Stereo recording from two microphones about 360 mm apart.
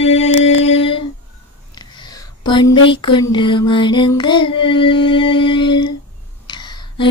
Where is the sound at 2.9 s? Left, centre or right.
Centre.